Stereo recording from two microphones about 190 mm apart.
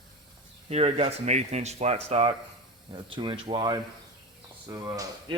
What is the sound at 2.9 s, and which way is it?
A man's voice, 25° right (ahead or behind).